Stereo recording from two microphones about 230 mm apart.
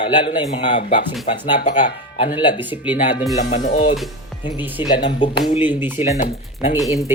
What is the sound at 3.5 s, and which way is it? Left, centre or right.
Speech, left.